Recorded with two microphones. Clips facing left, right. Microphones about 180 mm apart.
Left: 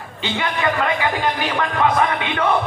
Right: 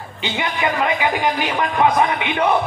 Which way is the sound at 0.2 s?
20° right (ahead or behind).